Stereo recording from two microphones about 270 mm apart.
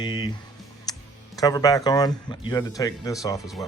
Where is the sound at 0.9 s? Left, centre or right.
Centre.